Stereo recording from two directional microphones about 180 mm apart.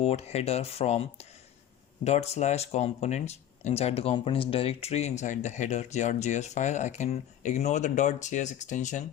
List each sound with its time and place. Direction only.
0.0 s speech: 35° left (ahead or behind)